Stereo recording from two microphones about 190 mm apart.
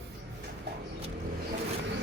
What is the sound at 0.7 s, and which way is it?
Vehicle, 60° right (ahead or behind).